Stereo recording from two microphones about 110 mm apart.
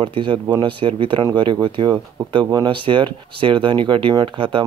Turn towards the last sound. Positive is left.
turn(degrees=-50)  # may be behind; listen again after turning